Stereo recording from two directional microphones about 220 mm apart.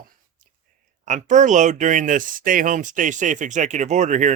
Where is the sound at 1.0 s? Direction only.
35° right (ahead or behind).